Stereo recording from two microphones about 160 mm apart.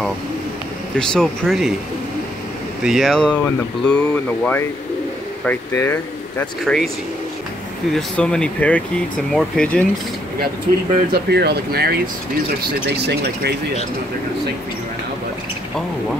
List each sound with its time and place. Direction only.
0.9 s speech: 5° left (ahead or behind)
2.8 s speech: centre (ahead or behind); by 6.4 s 15° left (ahead or behind)
6.6 s speech: centre (ahead or behind)
7.9 s speech: 5° left (ahead or behind)
11.1 s speech: 85° right